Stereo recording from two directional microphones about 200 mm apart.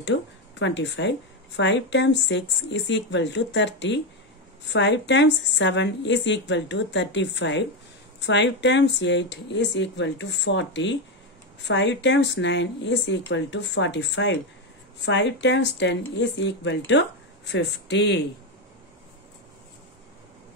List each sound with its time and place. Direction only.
0.0 s a woman's voice: 60° left (ahead or behind)